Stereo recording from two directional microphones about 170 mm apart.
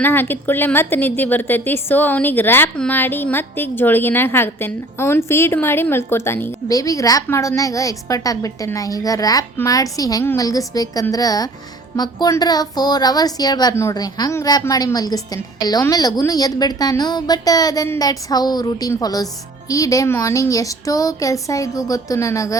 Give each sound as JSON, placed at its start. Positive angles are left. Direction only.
{"t": 0.0, "sound": "a woman's voice", "side_deg": 10}